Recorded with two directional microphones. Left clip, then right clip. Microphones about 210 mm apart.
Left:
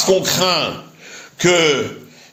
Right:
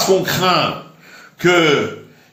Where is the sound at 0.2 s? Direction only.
40° left (ahead or behind).